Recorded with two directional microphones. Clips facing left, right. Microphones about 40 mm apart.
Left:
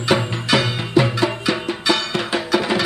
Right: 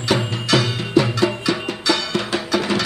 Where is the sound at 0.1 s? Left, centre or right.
Centre.